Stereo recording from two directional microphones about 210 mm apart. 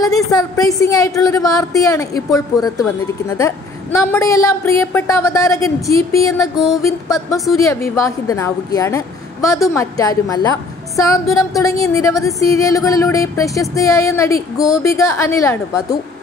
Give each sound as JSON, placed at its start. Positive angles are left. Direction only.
{"t": 0.0, "sound": "speech", "side_deg": 15}